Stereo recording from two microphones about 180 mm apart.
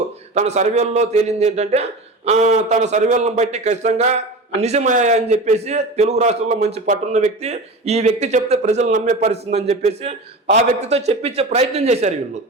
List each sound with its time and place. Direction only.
0.3 s a man's voice: 40° right (ahead or behind)